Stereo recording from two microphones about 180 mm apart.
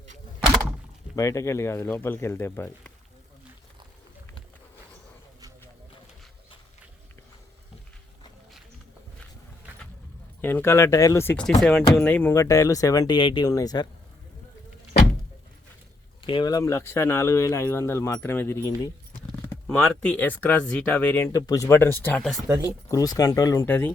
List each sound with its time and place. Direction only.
1.1 s speech: 15° left (ahead or behind)
10.4 s speech: 10° left (ahead or behind)
11.6 s speech: centre (ahead or behind); by 13.8 s 20° left (ahead or behind)
16.2 s speech: 25° left (ahead or behind); by 22.4 s 5° left (ahead or behind)
22.4 s speech: 20° right (ahead or behind)
22.9 s speech: 20° left (ahead or behind)